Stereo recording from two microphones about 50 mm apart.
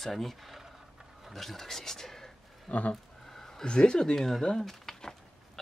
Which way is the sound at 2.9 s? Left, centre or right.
Centre.